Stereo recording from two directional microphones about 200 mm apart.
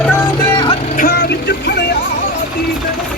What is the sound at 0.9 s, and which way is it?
Vehicle, 50° left (ahead or behind).